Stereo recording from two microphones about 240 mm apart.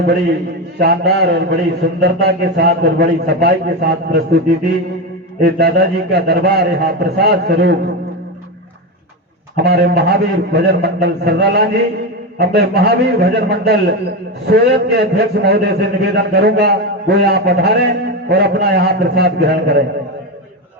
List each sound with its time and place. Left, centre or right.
0.8 s a man's voice: right
5.4 s a man's voice: right
9.6 s a man's voice: right